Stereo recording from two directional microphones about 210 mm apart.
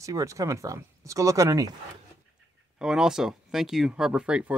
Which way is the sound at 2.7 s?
5° right (ahead or behind).